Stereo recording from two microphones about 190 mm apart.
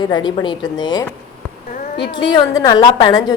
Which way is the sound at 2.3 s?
20° left (ahead or behind).